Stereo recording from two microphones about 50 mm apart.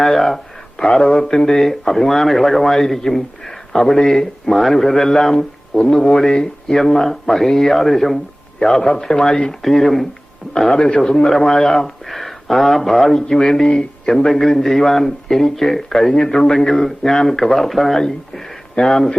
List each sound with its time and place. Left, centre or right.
0.0 s speech: centre
0.8 s speech: centre
10.8 s speech: centre
13.7 s speech: centre
14.3 s speech: centre